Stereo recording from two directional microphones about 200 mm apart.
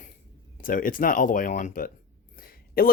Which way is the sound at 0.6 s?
45° left (ahead or behind).